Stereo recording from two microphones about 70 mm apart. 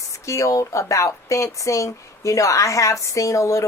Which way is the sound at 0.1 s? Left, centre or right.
Left.